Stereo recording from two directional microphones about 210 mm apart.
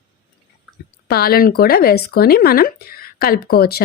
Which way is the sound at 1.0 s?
45° left (ahead or behind).